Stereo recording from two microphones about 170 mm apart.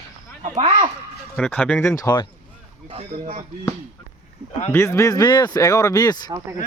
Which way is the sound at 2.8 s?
35° right (ahead or behind).